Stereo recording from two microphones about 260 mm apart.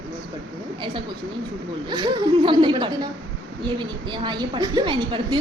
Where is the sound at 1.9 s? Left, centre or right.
Centre.